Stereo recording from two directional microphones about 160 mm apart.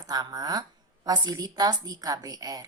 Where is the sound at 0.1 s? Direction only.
25° right (ahead or behind).